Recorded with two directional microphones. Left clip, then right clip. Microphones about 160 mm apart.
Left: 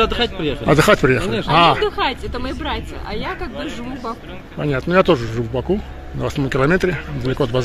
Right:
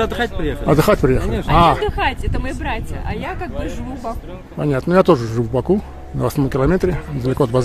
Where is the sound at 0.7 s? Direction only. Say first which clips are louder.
Left 1 dB; 15° right (ahead or behind); by 5.8 s 45° right (ahead or behind).